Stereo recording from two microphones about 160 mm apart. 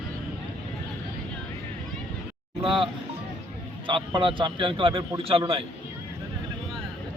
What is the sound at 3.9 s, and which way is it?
A man's voice, 30° right (ahead or behind).